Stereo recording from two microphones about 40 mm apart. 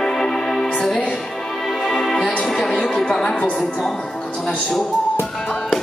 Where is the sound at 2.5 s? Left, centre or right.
Centre.